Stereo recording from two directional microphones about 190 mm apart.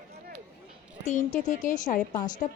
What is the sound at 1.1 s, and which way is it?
Speech, 40° left (ahead or behind).